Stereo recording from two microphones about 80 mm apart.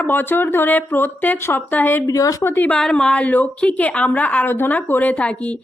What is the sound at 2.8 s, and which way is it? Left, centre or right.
A woman's voice, centre.